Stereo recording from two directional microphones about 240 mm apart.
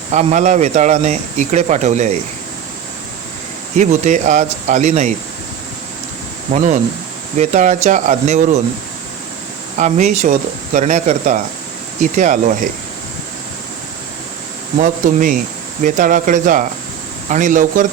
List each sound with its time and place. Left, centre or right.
0.1 s speech: right
3.8 s speech: right
6.5 s speech: right
9.7 s speech: right
14.8 s speech: right